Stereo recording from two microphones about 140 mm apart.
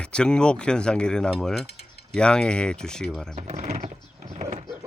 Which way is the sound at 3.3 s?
50° right (ahead or behind).